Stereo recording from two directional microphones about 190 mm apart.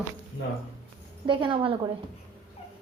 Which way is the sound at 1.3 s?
25° right (ahead or behind).